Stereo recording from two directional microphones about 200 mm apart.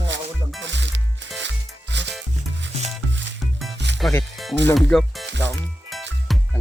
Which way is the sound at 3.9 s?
60° right (ahead or behind).